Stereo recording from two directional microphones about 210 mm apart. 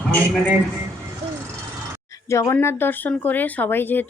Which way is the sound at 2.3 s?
15° left (ahead or behind).